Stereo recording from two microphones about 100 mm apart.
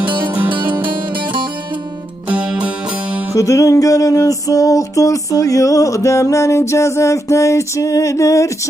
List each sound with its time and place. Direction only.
0.8 s music: 55° right (ahead or behind)
2.2 s music: 10° right (ahead or behind)
3.3 s music: 30° left (ahead or behind)